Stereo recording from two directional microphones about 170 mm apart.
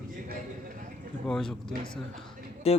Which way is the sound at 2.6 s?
35° left (ahead or behind).